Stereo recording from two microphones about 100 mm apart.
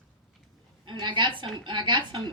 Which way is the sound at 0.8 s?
55° right (ahead or behind).